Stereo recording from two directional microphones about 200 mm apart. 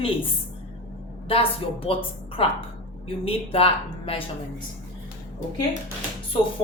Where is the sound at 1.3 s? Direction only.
30° left (ahead or behind).